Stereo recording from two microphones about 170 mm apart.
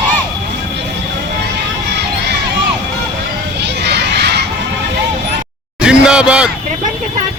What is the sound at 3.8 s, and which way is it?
Crowd, 80° right.